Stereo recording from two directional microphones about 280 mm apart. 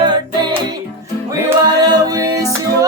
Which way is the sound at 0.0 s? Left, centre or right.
Centre.